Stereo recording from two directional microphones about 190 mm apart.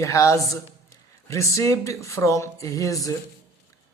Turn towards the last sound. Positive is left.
turn(degrees=15)  # may be behind; listen again after turning